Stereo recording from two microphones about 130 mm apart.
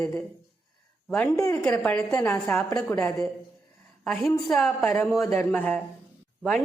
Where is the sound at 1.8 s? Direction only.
10° left (ahead or behind).